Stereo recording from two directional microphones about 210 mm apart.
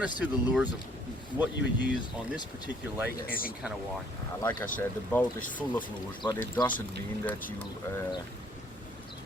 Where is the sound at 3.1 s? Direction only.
45° left (ahead or behind).